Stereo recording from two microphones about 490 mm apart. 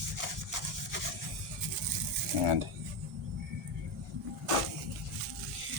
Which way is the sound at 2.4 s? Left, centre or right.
Right.